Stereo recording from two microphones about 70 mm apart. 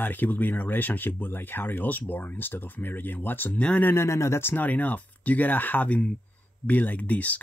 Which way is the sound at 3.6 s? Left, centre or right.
Centre.